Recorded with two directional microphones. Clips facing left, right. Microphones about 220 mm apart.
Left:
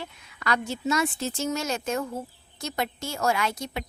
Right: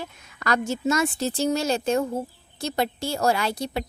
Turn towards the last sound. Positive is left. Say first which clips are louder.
# right 3 dB
turn(degrees=-35)  # may be behind; listen again after turning